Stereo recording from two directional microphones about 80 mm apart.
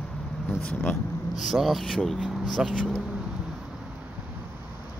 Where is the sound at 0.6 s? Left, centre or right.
Left.